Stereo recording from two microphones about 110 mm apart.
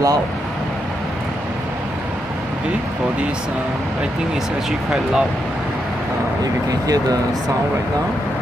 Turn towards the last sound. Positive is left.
turn(degrees=-35)  # may be behind; listen again after turning